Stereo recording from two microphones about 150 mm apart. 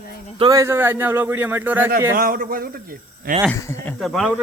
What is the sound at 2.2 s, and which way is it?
A man's voice, 75° right (ahead or behind).